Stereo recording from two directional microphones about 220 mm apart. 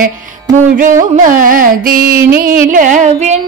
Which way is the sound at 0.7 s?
35° right (ahead or behind).